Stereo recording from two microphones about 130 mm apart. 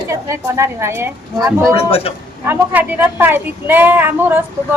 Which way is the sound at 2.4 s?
15° right (ahead or behind).